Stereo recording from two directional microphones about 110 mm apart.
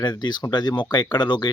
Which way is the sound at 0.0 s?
40° left (ahead or behind).